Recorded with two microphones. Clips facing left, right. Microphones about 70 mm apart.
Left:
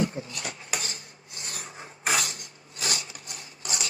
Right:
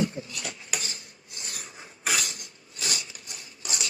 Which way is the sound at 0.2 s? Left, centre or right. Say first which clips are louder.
Left 1 dB; left.